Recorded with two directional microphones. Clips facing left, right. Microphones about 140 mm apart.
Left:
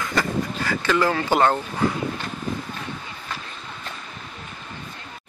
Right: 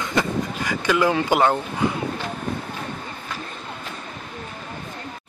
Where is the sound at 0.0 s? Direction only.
20° right (ahead or behind).